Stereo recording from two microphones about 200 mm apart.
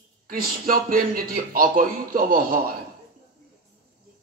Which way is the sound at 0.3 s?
45° right (ahead or behind).